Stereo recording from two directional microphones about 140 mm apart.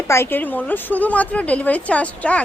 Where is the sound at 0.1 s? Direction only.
15° left (ahead or behind).